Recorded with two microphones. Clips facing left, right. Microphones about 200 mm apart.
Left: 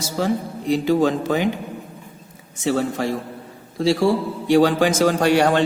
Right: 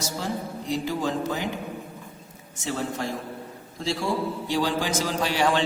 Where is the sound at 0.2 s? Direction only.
70° left (ahead or behind).